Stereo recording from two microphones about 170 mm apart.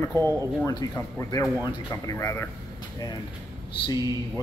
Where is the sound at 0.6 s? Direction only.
20° left (ahead or behind).